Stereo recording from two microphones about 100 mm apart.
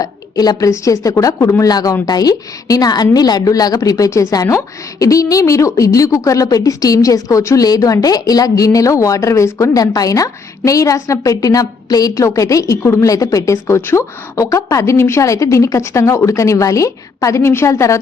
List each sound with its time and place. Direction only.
0.0 s a woman's voice: 40° left (ahead or behind)